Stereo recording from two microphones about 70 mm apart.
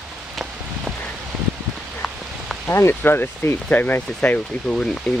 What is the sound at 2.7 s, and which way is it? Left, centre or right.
Speech, left.